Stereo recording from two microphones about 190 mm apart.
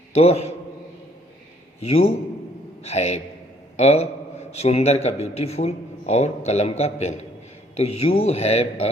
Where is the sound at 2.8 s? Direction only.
35° left (ahead or behind).